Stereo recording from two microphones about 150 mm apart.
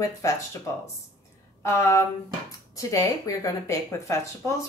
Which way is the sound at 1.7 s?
20° left (ahead or behind).